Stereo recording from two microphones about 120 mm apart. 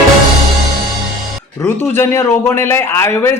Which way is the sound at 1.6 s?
20° left (ahead or behind).